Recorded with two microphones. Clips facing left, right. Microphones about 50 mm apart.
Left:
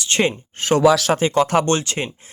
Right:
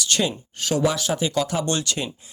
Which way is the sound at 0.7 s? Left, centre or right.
Left.